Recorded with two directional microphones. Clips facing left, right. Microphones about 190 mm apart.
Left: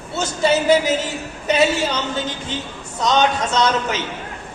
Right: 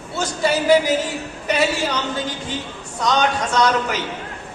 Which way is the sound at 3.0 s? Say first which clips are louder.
Left 2 dB; 20° left (ahead or behind).